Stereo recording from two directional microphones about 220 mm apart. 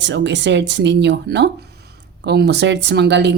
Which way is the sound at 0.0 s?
55° right (ahead or behind).